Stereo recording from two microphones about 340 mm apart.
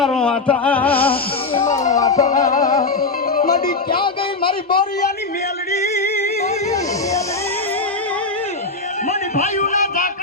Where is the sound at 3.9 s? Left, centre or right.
Centre.